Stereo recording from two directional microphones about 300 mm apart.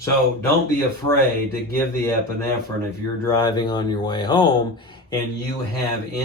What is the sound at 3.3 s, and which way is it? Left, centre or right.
Speech, centre.